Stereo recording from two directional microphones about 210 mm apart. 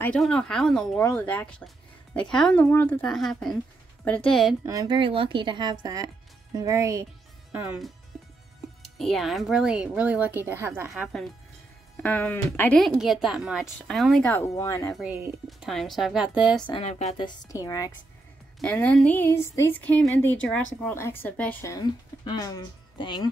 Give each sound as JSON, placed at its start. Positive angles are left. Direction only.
{"t": 0.0, "sound": "speech", "side_deg": 5}
{"t": 4.6, "sound": "speech", "side_deg": -20}
{"t": 8.1, "sound": "music", "side_deg": -5}
{"t": 8.9, "sound": "speech", "side_deg": 0}
{"t": 10.9, "sound": "speech", "side_deg": 0}
{"t": 15.0, "sound": "speech", "side_deg": -5}
{"t": 16.6, "sound": "a woman's voice", "side_deg": 25}